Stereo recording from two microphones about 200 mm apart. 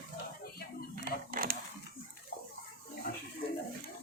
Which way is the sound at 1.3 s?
45° right (ahead or behind).